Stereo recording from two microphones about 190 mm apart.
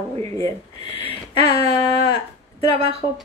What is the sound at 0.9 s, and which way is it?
Speech, 30° right (ahead or behind).